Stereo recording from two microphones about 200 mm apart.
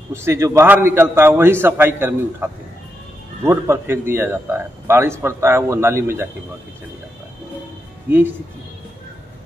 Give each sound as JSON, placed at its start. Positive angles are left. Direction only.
{"t": 0.1, "sound": "a man's voice", "side_deg": -15}